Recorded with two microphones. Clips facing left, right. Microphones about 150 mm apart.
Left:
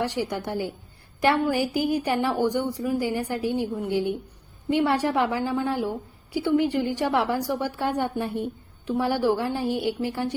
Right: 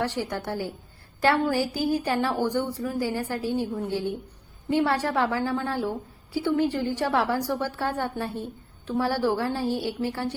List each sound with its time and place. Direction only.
0.0 s a woman's voice: 15° left (ahead or behind)